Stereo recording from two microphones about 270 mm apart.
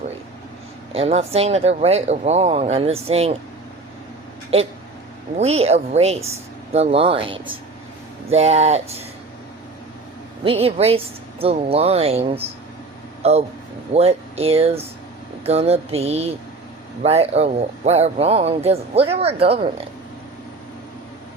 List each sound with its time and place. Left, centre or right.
0.9 s speech: right
4.5 s speech: right
10.4 s speech: right